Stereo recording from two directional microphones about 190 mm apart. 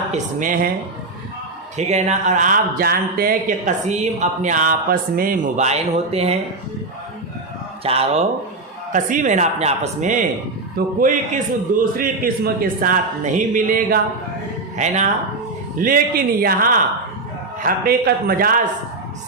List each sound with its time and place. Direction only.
0.1 s a man's voice: 45° right (ahead or behind)
1.7 s speech: 35° right (ahead or behind)
7.9 s speech: 35° right (ahead or behind)
8.9 s a man's voice: 45° right (ahead or behind)
15.8 s a man's voice: 50° right (ahead or behind)